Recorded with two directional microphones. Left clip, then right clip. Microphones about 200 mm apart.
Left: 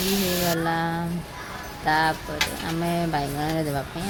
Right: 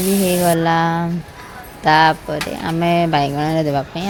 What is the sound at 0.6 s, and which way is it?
Speech, 35° right (ahead or behind).